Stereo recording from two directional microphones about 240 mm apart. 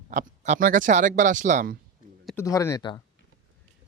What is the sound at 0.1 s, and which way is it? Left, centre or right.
Speech, right.